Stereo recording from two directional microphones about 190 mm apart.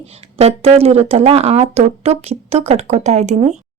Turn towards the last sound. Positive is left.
turn(degrees=-35)  # may be behind; listen again after turning